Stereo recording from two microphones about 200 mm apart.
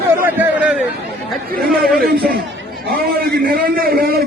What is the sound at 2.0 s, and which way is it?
A man's voice, 50° right (ahead or behind).